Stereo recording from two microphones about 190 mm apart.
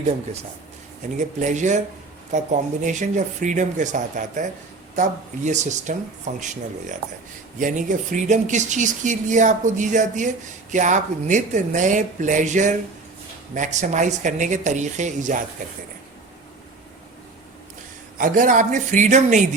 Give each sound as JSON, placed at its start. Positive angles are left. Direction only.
{"t": 1.2, "sound": "speech", "side_deg": -40}
{"t": 5.5, "sound": "speech", "side_deg": -40}
{"t": 18.2, "sound": "speech", "side_deg": -45}